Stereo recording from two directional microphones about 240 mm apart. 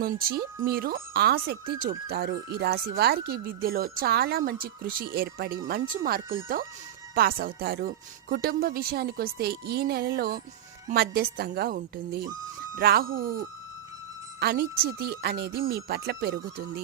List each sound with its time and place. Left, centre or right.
0.0 s speech: right